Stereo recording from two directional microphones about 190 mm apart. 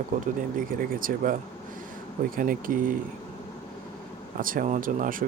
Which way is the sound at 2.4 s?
45° right (ahead or behind).